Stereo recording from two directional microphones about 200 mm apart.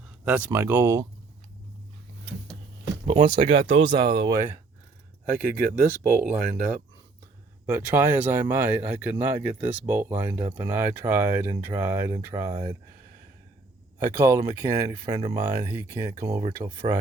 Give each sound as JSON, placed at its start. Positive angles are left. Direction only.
{"t": 0.3, "sound": "speech", "side_deg": -10}
{"t": 3.1, "sound": "speech", "side_deg": -25}
{"t": 5.3, "sound": "speech", "side_deg": -45}
{"t": 5.9, "sound": "speech", "side_deg": -10}
{"t": 7.7, "sound": "speech", "side_deg": -10}
{"t": 14.0, "sound": "speech", "side_deg": -10}